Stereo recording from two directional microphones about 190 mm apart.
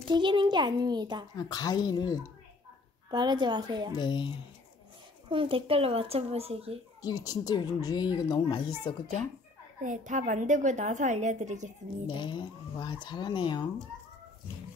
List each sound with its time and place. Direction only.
0.1 s a child's voice: 25° right (ahead or behind)
1.3 s a woman's voice: 20° left (ahead or behind)
3.1 s a child's voice: 25° right (ahead or behind)
3.9 s a woman's voice: 25° left (ahead or behind)
5.3 s a woman's voice: 25° right (ahead or behind)
7.0 s a woman's voice: 20° left (ahead or behind)
9.8 s a woman's voice: 40° right (ahead or behind)
12.1 s a woman's voice: 25° left (ahead or behind)